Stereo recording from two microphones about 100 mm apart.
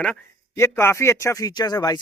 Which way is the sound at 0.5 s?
25° left (ahead or behind).